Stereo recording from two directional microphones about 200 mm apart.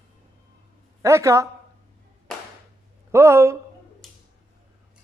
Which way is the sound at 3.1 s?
15° right (ahead or behind).